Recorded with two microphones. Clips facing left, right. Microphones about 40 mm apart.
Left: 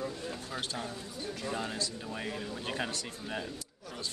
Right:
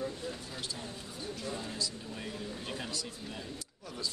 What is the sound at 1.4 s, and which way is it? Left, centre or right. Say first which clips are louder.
Speech: left 3 dB; left.